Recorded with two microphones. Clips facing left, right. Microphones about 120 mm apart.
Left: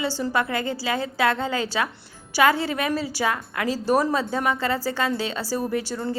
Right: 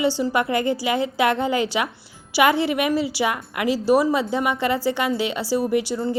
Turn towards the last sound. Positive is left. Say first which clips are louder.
# right 4 dB
turn(degrees=-15)  # may be behind; listen again after turning